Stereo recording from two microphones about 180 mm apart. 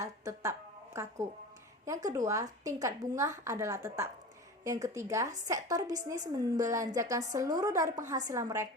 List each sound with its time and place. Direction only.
0.0 s a woman's voice: 15° right (ahead or behind)